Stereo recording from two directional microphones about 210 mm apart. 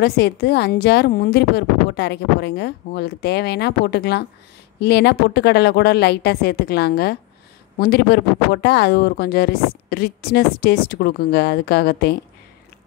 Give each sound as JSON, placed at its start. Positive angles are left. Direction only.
{"t": 0.0, "sound": "speech", "side_deg": 50}